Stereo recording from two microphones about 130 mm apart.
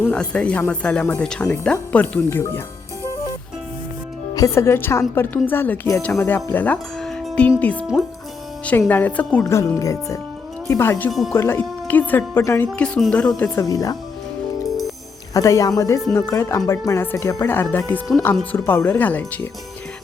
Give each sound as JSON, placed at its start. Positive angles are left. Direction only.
{"t": 0.1, "sound": "a woman's voice", "side_deg": 10}
{"t": 4.4, "sound": "a woman's voice", "side_deg": 20}
{"t": 7.3, "sound": "music", "side_deg": 10}
{"t": 7.6, "sound": "a woman's voice", "side_deg": 10}
{"t": 8.9, "sound": "a woman's voice", "side_deg": 15}
{"t": 9.4, "sound": "speech", "side_deg": 25}
{"t": 11.1, "sound": "speech", "side_deg": 0}
{"t": 11.3, "sound": "a woman's voice", "side_deg": 20}
{"t": 12.8, "sound": "a woman's voice", "side_deg": 5}
{"t": 13.6, "sound": "speech", "side_deg": 25}
{"t": 15.3, "sound": "a woman's voice", "side_deg": 25}